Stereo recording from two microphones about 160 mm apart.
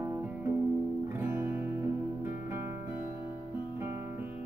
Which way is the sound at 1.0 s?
15° right (ahead or behind).